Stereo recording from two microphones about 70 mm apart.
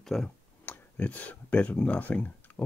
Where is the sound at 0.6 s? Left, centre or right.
Left.